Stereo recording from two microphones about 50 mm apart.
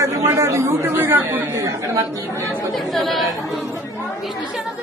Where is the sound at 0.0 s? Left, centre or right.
Right.